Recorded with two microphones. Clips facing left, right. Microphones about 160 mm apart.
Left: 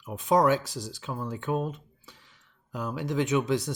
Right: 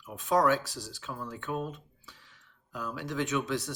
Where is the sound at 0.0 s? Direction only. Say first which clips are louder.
Left 3 dB; 15° left (ahead or behind).